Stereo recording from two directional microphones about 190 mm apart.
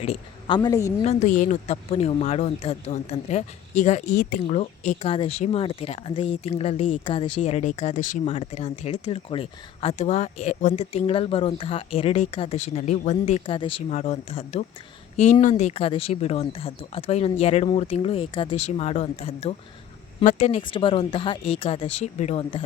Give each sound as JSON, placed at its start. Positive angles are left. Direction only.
{"t": 0.0, "sound": "a woman's voice", "side_deg": 30}
{"t": 1.0, "sound": "speech", "side_deg": 40}
{"t": 20.6, "sound": "speech", "side_deg": 25}